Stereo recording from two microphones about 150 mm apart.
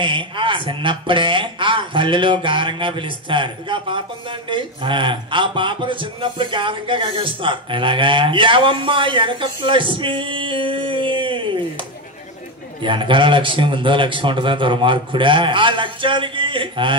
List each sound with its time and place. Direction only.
0.0 s speech: 35° right (ahead or behind)
12.8 s speech: 35° right (ahead or behind)